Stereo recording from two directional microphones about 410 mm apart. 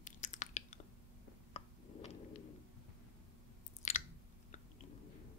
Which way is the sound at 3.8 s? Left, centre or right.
Centre.